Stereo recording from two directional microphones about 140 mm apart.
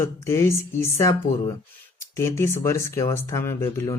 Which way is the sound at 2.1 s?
20° left (ahead or behind).